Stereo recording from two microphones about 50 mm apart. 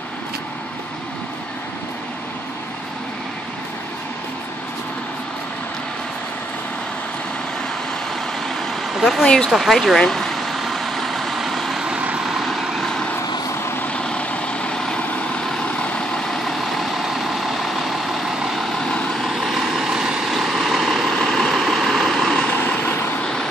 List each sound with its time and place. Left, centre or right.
9.2 s speech: centre
9.5 s speech: centre
9.9 s vehicle: centre
12.4 s vehicle: centre
13.9 s vehicle: left; by 19.9 s centre
19.9 s vehicle: centre
20.2 s vehicle: centre
21.2 s vehicle: centre
22.7 s vehicle: left